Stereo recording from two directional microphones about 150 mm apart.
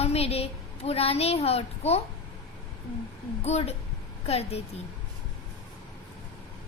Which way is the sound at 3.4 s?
45° left (ahead or behind).